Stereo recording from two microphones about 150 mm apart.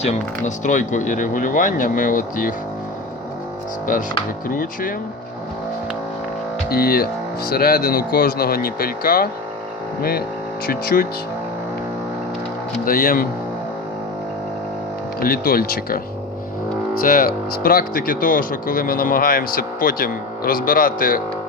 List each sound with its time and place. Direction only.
0.0 s speech: 50° left (ahead or behind); by 2.6 s 65° left (ahead or behind)
4.4 s speech: 70° left (ahead or behind)
6.7 s speech: 90° left
7.5 s speech: 75° left (ahead or behind)
12.8 s speech: 75° left (ahead or behind)
15.2 s speech: 80° left